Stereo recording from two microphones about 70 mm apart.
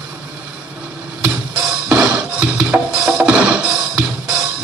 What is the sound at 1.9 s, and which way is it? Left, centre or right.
Music, centre.